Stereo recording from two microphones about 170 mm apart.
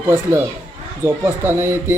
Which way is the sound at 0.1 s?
15° right (ahead or behind).